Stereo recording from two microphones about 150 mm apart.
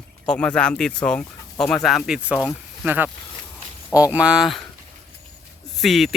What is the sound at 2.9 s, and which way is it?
Speech, 10° right (ahead or behind).